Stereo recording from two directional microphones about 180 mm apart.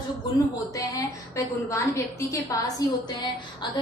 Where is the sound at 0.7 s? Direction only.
20° left (ahead or behind).